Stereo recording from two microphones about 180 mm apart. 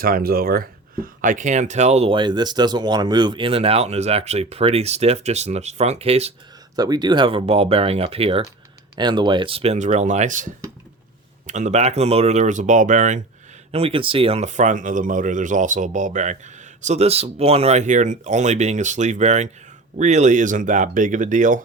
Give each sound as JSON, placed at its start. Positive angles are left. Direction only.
{"t": 0.0, "sound": "speech", "side_deg": -55}
{"t": 6.7, "sound": "speech", "side_deg": -20}
{"t": 13.7, "sound": "speech", "side_deg": -35}